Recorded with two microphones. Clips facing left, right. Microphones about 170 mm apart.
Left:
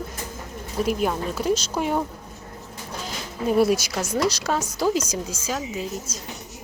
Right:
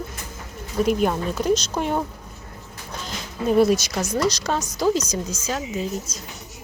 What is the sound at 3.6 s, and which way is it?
Speech, 10° left (ahead or behind).